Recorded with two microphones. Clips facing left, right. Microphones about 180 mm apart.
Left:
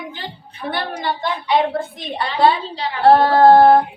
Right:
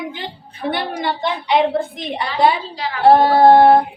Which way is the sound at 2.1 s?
15° right (ahead or behind).